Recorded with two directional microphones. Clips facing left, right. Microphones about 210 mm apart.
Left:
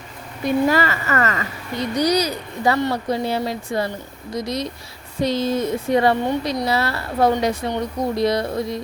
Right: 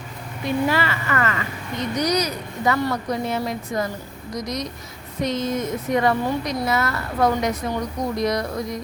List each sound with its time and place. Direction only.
0.4 s a woman's voice: 45° left (ahead or behind)